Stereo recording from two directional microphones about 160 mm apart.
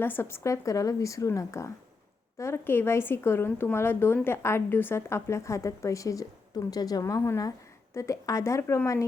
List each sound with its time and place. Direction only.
0.0 s speech: 15° left (ahead or behind)